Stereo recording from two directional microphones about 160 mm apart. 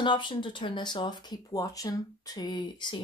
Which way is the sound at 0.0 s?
30° left (ahead or behind).